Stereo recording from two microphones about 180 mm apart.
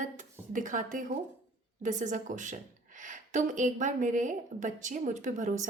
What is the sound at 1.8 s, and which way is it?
A woman's voice, 45° right (ahead or behind).